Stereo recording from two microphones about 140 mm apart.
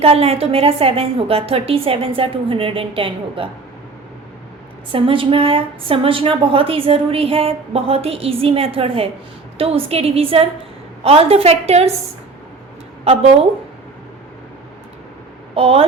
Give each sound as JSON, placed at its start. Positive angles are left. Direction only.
{"t": 0.0, "sound": "a woman's voice", "side_deg": -45}
{"t": 4.9, "sound": "a woman's voice", "side_deg": -40}
{"t": 13.1, "sound": "a woman's voice", "side_deg": -45}
{"t": 15.5, "sound": "a woman's voice", "side_deg": -45}